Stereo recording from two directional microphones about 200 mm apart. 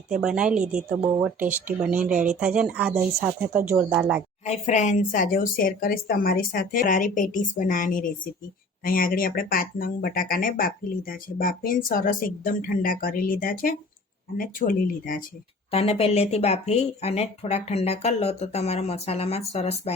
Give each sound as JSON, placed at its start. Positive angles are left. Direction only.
{"t": 0.1, "sound": "speech", "side_deg": -5}
{"t": 4.4, "sound": "speech", "side_deg": 35}
{"t": 15.7, "sound": "speech", "side_deg": 30}